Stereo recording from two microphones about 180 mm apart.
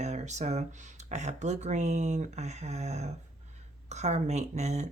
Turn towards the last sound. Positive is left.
turn(degrees=-40)  # may be behind; listen again after turning